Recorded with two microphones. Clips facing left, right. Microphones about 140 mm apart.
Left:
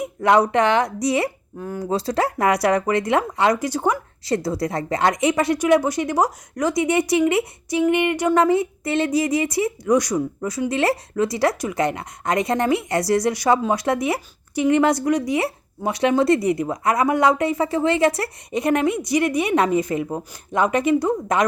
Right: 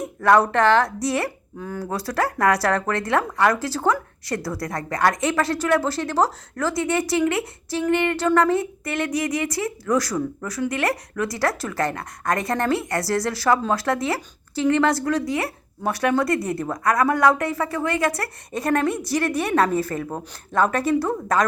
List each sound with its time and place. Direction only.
0.0 s a woman's voice: 20° left (ahead or behind)
1.5 s a woman's voice: 10° left (ahead or behind)
1.9 s a woman's voice: 25° left (ahead or behind)